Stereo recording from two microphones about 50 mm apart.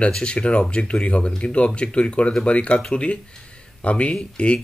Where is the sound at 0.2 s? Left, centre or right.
Left.